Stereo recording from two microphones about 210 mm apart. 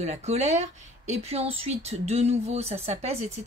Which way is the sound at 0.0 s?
30° right (ahead or behind).